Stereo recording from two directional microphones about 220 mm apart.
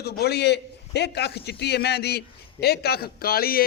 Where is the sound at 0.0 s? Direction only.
45° left (ahead or behind).